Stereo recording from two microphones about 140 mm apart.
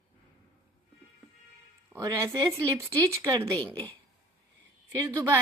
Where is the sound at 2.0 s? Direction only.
25° right (ahead or behind).